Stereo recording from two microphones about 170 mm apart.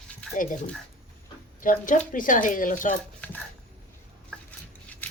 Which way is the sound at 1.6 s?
55° left (ahead or behind).